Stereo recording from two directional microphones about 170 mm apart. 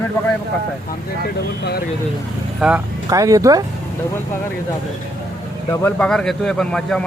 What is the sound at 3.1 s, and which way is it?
Speech, 20° right (ahead or behind).